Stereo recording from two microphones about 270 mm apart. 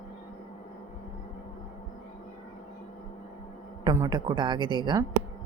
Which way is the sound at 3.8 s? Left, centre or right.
Centre.